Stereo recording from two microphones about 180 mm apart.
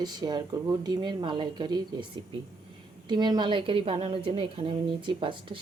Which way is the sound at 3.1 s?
25° right (ahead or behind).